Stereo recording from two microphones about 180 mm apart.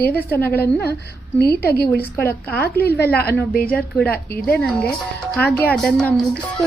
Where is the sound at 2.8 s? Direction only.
60° left (ahead or behind).